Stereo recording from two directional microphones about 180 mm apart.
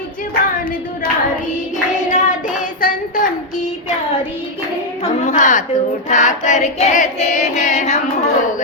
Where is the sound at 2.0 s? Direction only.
45° left (ahead or behind).